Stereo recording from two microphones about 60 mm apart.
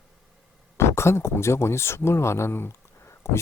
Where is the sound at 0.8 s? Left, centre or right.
Left.